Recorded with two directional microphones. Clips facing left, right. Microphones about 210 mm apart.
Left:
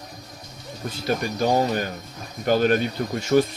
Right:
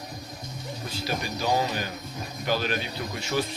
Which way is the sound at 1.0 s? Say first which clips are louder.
Left 6 dB; 50° left (ahead or behind).